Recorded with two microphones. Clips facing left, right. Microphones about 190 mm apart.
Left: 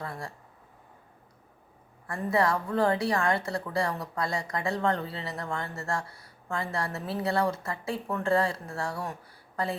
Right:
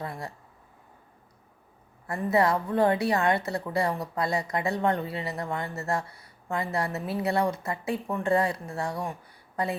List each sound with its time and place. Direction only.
0.0 s speech: 20° right (ahead or behind)
2.0 s speech: 20° right (ahead or behind)